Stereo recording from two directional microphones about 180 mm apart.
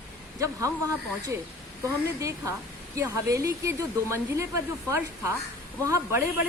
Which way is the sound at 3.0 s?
15° right (ahead or behind).